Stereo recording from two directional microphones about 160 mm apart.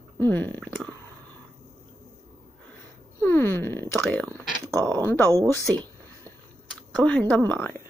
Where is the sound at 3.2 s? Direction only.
15° left (ahead or behind).